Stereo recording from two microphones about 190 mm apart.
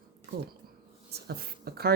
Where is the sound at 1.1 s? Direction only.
55° right (ahead or behind).